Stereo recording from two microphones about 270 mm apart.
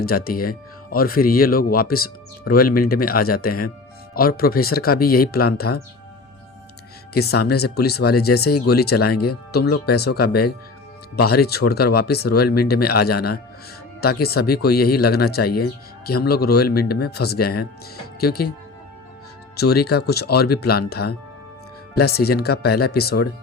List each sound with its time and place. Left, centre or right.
0.0 s speech: left
7.1 s speech: left
19.5 s speech: left